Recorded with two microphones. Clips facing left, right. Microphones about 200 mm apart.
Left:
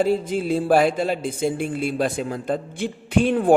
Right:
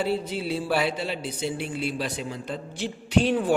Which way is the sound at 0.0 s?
45° left (ahead or behind).